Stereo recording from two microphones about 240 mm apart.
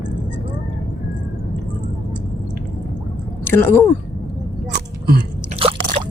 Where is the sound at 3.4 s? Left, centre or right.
Centre.